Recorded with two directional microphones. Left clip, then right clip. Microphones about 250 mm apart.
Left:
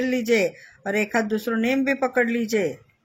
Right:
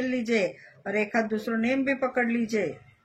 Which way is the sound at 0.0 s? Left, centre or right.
Left.